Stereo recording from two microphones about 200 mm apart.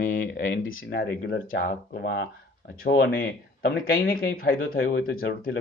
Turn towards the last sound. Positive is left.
turn(degrees=50)  # may be behind; listen again after turning